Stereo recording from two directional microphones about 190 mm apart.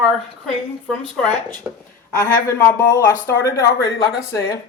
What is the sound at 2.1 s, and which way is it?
Speech, 15° left (ahead or behind).